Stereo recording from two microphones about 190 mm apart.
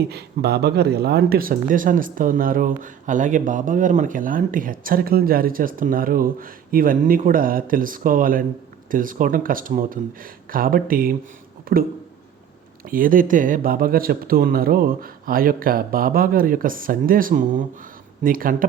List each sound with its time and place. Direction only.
0.1 s speech: 60° right (ahead or behind)
12.9 s speech: 45° right (ahead or behind)